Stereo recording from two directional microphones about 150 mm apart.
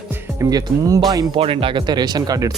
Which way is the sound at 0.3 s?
25° right (ahead or behind).